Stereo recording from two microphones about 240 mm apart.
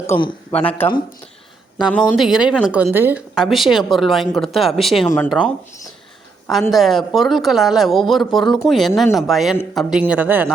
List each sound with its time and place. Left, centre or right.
0.1 s speech: centre
0.5 s speech: centre
6.5 s speech: centre